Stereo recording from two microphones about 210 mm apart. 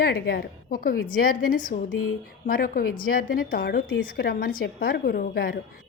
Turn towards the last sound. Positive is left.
turn(degrees=45)  # may be behind; listen again after turning